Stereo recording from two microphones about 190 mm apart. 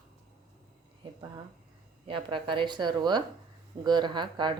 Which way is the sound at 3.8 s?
25° right (ahead or behind).